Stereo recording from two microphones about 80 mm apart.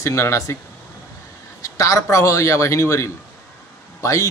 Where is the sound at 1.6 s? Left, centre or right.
Left.